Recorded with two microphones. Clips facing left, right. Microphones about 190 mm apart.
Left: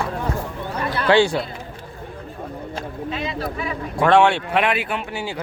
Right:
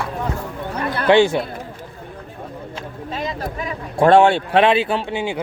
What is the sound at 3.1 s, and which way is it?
Speech, 40° right (ahead or behind).